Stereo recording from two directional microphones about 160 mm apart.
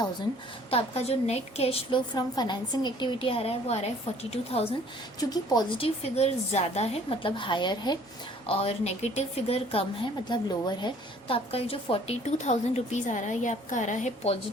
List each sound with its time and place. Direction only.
0.7 s a woman's voice: 40° left (ahead or behind)
5.3 s a woman's voice: 25° left (ahead or behind)
8.4 s a woman's voice: 40° left (ahead or behind)
10.2 s a woman's voice: 25° left (ahead or behind); by 14.3 s 50° left (ahead or behind)